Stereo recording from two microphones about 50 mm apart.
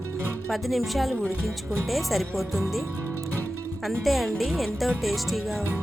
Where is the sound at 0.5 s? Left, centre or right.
Centre.